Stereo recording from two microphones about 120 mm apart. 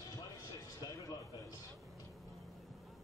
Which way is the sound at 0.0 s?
30° left (ahead or behind).